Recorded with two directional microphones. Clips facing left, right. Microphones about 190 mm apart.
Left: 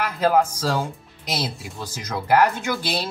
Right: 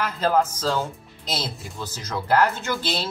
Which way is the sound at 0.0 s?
10° left (ahead or behind).